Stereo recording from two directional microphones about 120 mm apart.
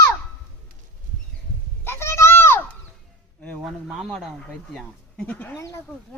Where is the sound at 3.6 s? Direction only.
Centre (ahead or behind).